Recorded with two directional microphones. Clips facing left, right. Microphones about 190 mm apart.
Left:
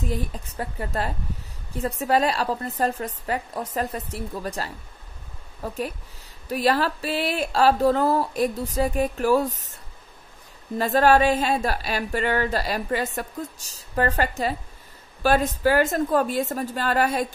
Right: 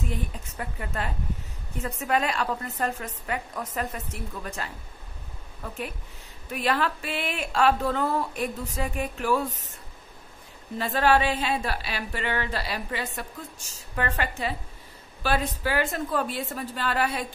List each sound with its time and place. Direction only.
0.1 s speech: 35° left (ahead or behind)
10.8 s a woman's voice: 40° left (ahead or behind)